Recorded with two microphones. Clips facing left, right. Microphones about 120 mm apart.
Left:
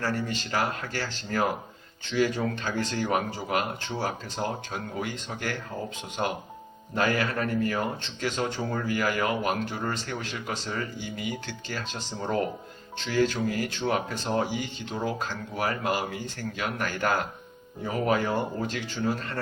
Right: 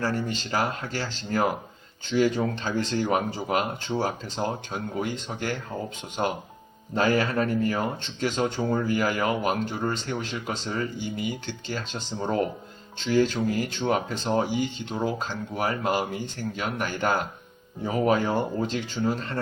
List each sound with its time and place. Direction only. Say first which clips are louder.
0.0 s speech: right 2 dB; 30° right (ahead or behind)